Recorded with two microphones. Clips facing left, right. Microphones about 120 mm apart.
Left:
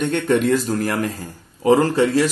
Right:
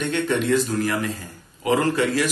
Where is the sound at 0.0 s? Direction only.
45° left (ahead or behind).